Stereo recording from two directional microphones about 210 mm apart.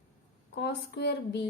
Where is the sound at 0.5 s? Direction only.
50° left (ahead or behind).